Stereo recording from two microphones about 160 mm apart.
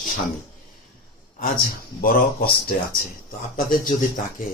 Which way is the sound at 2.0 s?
65° left (ahead or behind).